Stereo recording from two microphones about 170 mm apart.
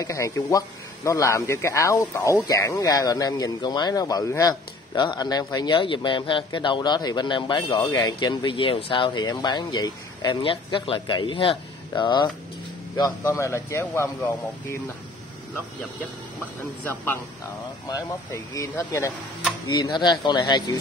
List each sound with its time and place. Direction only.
0.0 s speech: 20° left (ahead or behind)
16.8 s speech: 15° left (ahead or behind)